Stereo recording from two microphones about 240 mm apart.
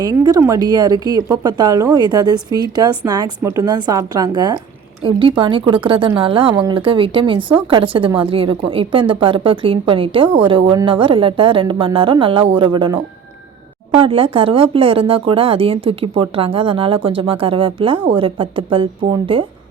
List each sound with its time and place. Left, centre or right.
0.0 s speech: centre